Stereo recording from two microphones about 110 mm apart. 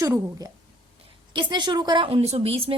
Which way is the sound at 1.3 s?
45° right (ahead or behind).